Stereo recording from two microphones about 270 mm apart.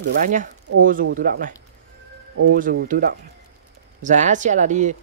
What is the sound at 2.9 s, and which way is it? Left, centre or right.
Speech, right.